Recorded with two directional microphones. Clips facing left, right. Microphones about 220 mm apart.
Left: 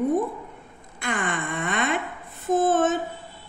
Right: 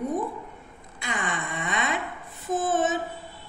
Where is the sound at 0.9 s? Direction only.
55° left (ahead or behind).